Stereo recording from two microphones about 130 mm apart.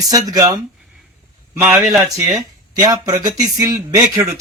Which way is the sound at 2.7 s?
30° right (ahead or behind).